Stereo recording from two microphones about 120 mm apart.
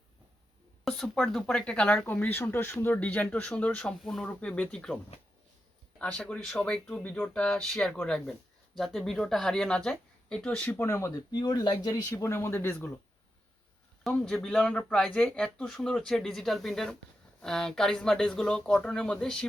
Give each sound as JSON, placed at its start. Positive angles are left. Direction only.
{"t": 0.9, "sound": "speech", "side_deg": 5}
{"t": 6.0, "sound": "speech", "side_deg": 10}
{"t": 10.8, "sound": "speech", "side_deg": 20}
{"t": 11.3, "sound": "speech", "side_deg": 35}
{"t": 14.0, "sound": "speech", "side_deg": 5}